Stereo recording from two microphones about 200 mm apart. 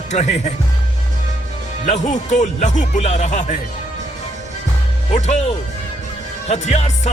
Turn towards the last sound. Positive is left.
turn(degrees=35)  # may be behind; listen again after turning